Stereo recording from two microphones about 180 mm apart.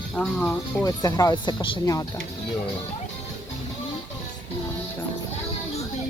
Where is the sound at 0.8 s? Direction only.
20° left (ahead or behind).